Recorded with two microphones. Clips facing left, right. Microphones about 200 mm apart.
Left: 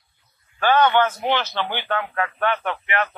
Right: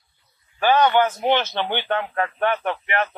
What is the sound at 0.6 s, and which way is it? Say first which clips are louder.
Speech: even; 15° right (ahead or behind).